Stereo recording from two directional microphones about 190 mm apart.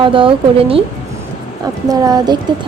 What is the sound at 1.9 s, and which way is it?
Speech, 20° right (ahead or behind).